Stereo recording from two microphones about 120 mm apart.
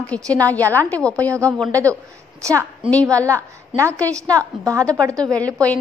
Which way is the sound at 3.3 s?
25° right (ahead or behind).